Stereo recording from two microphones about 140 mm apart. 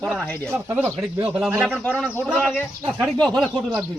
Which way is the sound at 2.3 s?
10° left (ahead or behind).